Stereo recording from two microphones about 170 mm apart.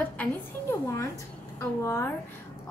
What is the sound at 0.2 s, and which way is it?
A woman's voice, 15° left (ahead or behind).